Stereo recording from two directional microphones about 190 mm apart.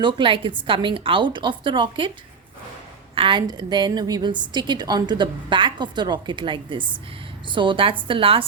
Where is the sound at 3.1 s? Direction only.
25° right (ahead or behind).